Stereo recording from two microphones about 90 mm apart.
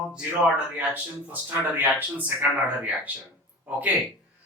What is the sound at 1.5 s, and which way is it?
Speech, 20° right (ahead or behind).